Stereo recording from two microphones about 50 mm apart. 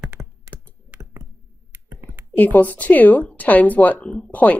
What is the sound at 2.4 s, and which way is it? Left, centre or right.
A woman's voice, left.